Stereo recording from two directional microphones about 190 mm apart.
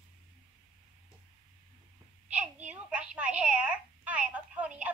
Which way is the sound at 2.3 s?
5° right (ahead or behind).